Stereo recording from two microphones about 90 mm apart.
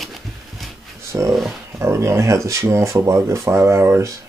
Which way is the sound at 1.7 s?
35° right (ahead or behind).